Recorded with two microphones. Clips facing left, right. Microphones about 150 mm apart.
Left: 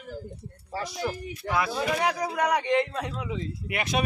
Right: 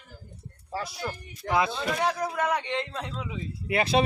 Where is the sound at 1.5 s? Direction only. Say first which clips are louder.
Right 2 dB; 25° right (ahead or behind).